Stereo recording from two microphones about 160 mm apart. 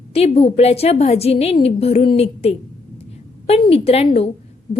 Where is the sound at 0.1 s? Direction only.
40° left (ahead or behind).